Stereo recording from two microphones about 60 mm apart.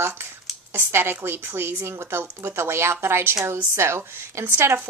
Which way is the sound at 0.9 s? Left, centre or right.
Right.